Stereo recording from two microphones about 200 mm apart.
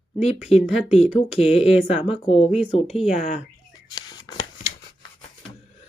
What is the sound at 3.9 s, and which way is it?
Shuffling cards, 20° left (ahead or behind).